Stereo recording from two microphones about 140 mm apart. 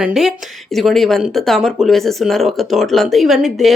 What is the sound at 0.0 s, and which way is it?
Speech, 5° right (ahead or behind).